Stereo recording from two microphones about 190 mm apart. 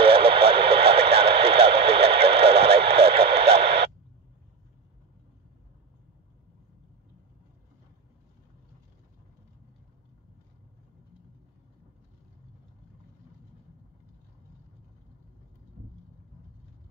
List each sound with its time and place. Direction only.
0.0 s radio: 30° right (ahead or behind)